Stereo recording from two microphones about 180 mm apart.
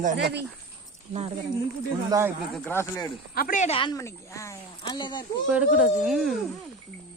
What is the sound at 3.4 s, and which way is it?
Speech, 50° left (ahead or behind).